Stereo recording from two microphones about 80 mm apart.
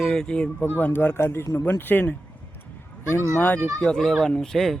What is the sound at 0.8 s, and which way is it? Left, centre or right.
Speech, left.